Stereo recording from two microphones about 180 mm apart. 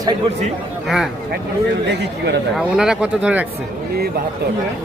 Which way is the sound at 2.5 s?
Centre (ahead or behind).